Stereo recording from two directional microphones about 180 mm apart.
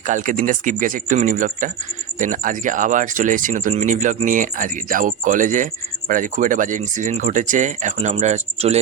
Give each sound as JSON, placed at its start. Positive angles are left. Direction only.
{"t": 0.1, "sound": "speech", "side_deg": -45}